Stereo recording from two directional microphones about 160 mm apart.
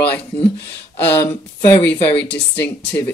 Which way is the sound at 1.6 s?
15° left (ahead or behind).